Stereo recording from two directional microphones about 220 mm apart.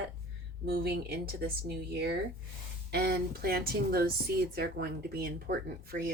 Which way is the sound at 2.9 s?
45° right (ahead or behind).